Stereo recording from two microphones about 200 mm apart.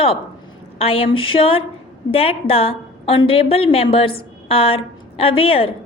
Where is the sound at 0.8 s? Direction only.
30° left (ahead or behind).